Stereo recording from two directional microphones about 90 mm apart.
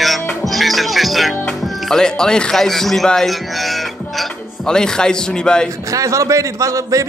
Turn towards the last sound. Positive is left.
turn(degrees=-35)  # may be behind; listen again after turning